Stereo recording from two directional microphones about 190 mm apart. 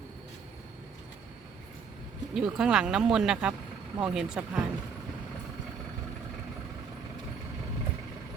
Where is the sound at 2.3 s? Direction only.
5° right (ahead or behind).